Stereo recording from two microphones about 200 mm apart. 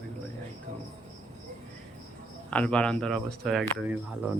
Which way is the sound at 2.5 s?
5° left (ahead or behind).